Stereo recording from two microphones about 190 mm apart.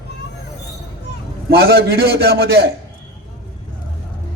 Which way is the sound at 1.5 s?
60° right (ahead or behind).